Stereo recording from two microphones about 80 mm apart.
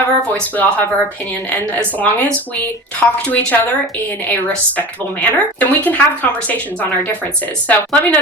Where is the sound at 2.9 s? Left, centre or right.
Centre.